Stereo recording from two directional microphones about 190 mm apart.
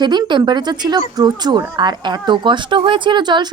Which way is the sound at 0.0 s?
20° right (ahead or behind).